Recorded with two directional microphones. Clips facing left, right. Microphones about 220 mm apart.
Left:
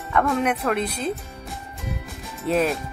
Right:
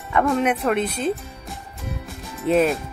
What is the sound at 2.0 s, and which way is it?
Music, centre (ahead or behind).